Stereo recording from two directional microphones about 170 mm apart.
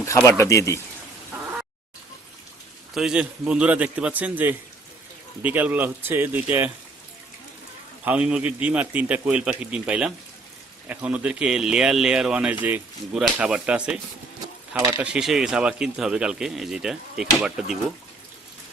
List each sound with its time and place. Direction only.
0.3 s speech: 20° left (ahead or behind)
2.9 s a man's voice: 5° right (ahead or behind)
8.0 s a man's voice: 5° right (ahead or behind)